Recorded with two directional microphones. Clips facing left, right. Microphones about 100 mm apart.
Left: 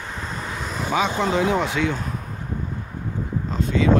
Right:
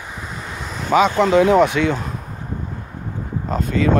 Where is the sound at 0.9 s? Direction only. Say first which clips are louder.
Right 8 dB; 90° right; by 2.0 s 65° right (ahead or behind).